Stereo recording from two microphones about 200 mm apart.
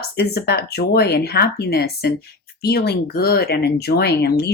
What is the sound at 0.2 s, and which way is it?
Speech, 55° left (ahead or behind).